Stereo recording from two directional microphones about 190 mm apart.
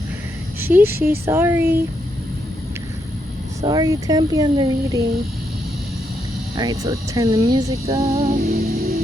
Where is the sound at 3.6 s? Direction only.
20° right (ahead or behind).